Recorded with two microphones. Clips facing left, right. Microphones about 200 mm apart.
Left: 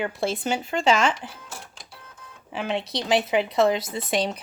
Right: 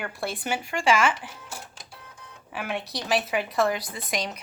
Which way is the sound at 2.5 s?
25° left (ahead or behind).